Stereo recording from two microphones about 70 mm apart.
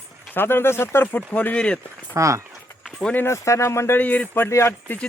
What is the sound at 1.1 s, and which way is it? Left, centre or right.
Speech, left.